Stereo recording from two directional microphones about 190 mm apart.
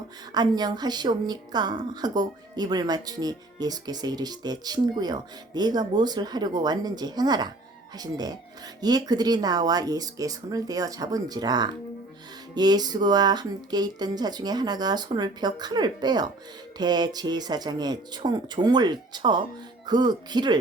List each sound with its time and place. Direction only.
0.3 s a woman's voice: 20° right (ahead or behind)